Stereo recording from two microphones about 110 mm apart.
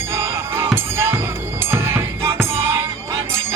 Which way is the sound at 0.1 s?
25° right (ahead or behind).